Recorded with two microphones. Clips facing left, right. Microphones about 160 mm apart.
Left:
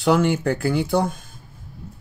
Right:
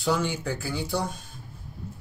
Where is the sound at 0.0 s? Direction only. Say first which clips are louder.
Left 8 dB; 60° left (ahead or behind).